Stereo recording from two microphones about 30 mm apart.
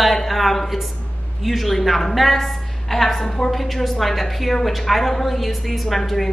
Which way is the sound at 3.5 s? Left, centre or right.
Centre.